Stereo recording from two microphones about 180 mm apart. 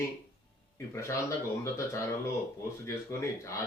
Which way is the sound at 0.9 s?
15° left (ahead or behind).